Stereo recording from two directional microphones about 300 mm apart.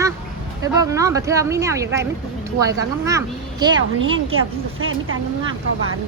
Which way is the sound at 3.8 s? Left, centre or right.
Right.